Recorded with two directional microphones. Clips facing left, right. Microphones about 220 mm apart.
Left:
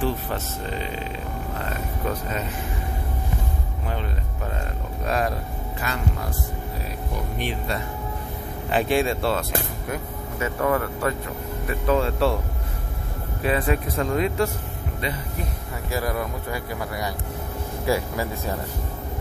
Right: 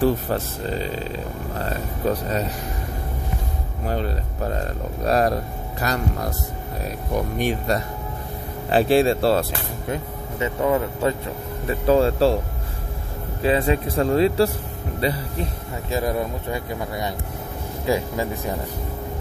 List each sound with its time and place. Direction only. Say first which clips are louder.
0.0 s speech: right 6 dB; 35° right (ahead or behind)
3.8 s speech: right 7 dB; 40° right (ahead or behind)
7.3 s speech: right 5 dB; 45° right (ahead or behind)
9.8 s speech: right 2 dB; 20° right (ahead or behind)
13.4 s speech: right 3 dB; 25° right (ahead or behind)
15.9 s speech: right 3 dB; 25° right (ahead or behind)